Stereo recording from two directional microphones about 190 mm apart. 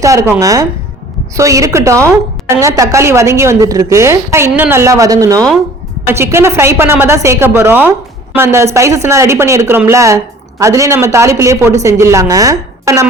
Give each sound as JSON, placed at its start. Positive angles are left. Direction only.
{"t": 0.0, "sound": "a woman's voice", "side_deg": -15}